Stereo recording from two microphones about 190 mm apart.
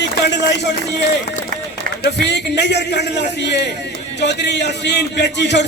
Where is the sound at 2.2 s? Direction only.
65° left (ahead or behind).